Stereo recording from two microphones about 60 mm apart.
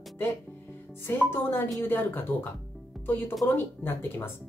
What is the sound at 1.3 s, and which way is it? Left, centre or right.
Speech, left.